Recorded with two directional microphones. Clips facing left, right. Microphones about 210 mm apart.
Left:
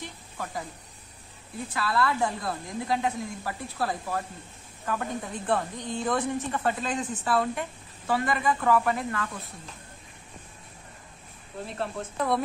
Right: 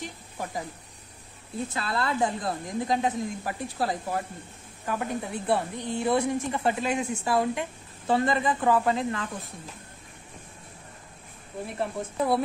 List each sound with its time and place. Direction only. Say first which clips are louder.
0.0 s speech: right 2 dB; 15° right (ahead or behind)
1.7 s a woman's voice: left 4 dB; 25° right (ahead or behind)
8.1 s speech: right 2 dB; 25° right (ahead or behind)
11.6 s a woman's voice: right 2 dB; 15° right (ahead or behind)